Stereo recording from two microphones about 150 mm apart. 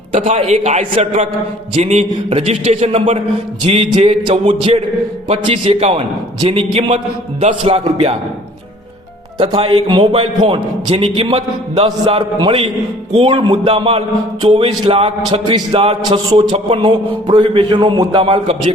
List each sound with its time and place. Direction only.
0.1 s a man's voice: 40° right (ahead or behind)
5.6 s a man's voice: 40° right (ahead or behind)
9.4 s a man's voice: 35° right (ahead or behind)